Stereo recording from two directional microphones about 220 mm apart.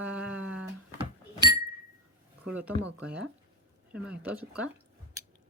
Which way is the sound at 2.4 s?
5° right (ahead or behind).